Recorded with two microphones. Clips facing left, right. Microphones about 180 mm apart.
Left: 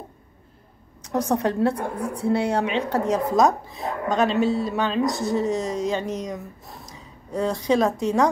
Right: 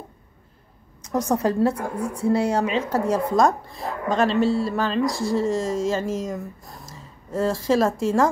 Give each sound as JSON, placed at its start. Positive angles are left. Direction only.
{"t": 1.3, "sound": "speech", "side_deg": 0}